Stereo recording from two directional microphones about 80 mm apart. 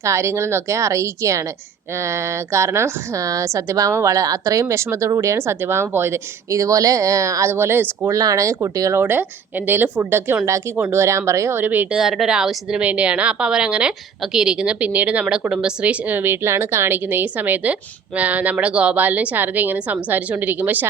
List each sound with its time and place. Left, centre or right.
0.0 s speech: right
8.1 s speech: right
9.0 s a woman's voice: right
11.5 s a woman's voice: right
11.9 s a woman's voice: centre; by 20.8 s right